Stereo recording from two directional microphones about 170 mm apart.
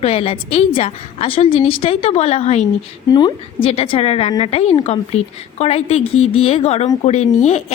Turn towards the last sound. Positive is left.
turn(degrees=40)  # may be behind; listen again after turning